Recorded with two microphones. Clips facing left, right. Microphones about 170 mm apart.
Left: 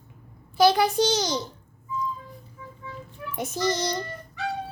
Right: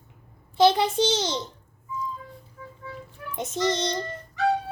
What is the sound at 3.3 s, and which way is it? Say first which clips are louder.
Speech: right 1 dB; 25° right (ahead or behind).